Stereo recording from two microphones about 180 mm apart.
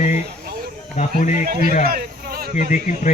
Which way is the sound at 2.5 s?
45° left (ahead or behind).